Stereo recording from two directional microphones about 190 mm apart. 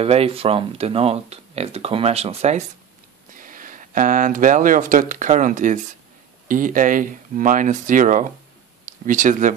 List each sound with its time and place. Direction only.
0.0 s speech: 30° right (ahead or behind)
3.3 s speech: 45° right (ahead or behind)